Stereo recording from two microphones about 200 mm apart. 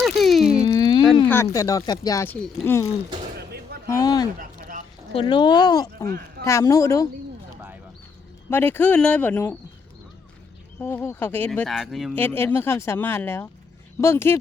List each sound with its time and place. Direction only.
0.0 s a sound: centre (ahead or behind)
0.7 s a sound: 20° left (ahead or behind)
1.3 s speech: 15° left (ahead or behind)
3.8 s speech: 15° left (ahead or behind)
4.4 s a sound: 40° right (ahead or behind)
5.1 s speech: 25° left (ahead or behind)
6.1 s speech: 50° right (ahead or behind)
6.4 s speech: 15° left (ahead or behind)
8.4 s speech: 10° left (ahead or behind)
10.8 s speech: 10° left (ahead or behind)
12.1 s speech: 10° left (ahead or behind)